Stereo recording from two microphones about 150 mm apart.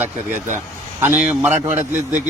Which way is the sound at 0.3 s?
55° right (ahead or behind).